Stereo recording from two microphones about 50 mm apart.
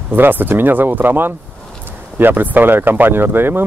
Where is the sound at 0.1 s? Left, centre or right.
Right.